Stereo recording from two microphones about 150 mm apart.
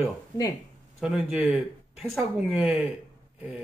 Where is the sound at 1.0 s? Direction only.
5° right (ahead or behind).